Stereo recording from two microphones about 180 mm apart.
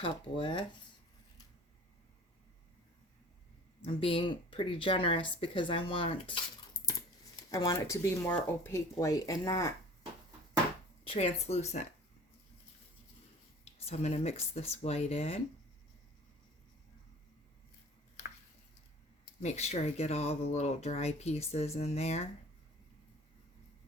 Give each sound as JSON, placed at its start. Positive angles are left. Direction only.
{"t": 0.0, "sound": "speech", "side_deg": 25}
{"t": 3.8, "sound": "speech", "side_deg": 30}
{"t": 7.5, "sound": "speech", "side_deg": 20}
{"t": 11.0, "sound": "speech", "side_deg": 35}
{"t": 13.7, "sound": "speech", "side_deg": 35}
{"t": 19.4, "sound": "speech", "side_deg": 35}